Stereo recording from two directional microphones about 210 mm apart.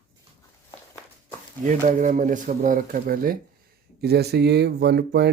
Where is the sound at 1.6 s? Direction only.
35° right (ahead or behind).